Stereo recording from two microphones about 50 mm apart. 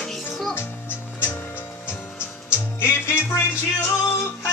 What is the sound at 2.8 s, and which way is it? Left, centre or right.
Music, left.